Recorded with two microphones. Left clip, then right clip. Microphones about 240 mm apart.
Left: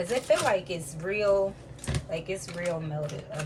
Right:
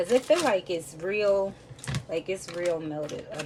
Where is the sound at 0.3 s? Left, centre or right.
Right.